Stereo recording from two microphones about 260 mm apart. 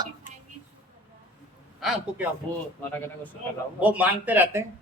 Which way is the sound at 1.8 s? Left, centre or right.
Centre.